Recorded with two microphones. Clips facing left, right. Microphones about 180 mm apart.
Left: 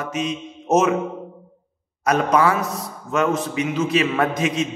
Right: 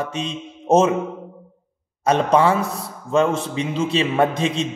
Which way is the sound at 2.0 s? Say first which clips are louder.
Right 1 dB; 30° right (ahead or behind).